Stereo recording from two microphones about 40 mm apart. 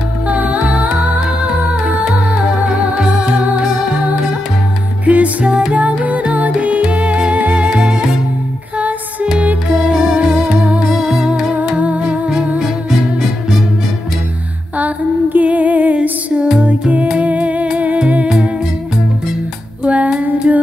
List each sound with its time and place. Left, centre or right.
0.3 s music: right
5.0 s music: right
10.8 s music: centre
11.8 s music: right
14.8 s female singing: right
17.2 s music: right
19.8 s child singing: right